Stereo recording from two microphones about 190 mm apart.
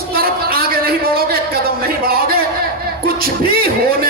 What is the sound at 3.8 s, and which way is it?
Speech, 50° right (ahead or behind).